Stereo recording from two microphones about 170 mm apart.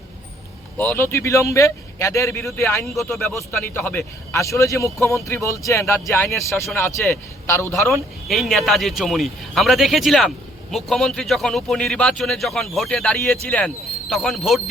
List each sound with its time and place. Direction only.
0.8 s a man's voice: 10° left (ahead or behind)
2.8 s a man's voice: centre (ahead or behind); by 7.8 s 15° left (ahead or behind)
8.3 s speech: centre (ahead or behind)